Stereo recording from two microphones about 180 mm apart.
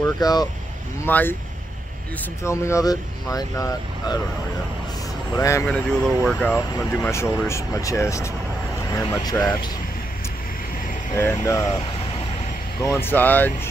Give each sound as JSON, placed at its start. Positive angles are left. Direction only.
{"t": 0.0, "sound": "speech", "side_deg": 20}
{"t": 1.0, "sound": "speech", "side_deg": 10}
{"t": 2.4, "sound": "speech", "side_deg": 15}
{"t": 5.3, "sound": "speech", "side_deg": 15}
{"t": 5.7, "sound": "speech", "side_deg": 0}
{"t": 11.1, "sound": "speech", "side_deg": 15}
{"t": 12.8, "sound": "speech", "side_deg": 15}